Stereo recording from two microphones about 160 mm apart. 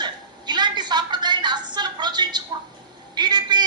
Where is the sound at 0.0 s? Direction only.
25° right (ahead or behind).